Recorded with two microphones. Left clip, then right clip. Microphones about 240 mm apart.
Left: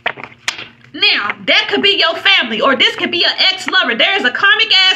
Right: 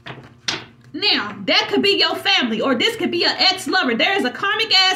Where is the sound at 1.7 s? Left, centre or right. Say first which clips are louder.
Left 5 dB; right.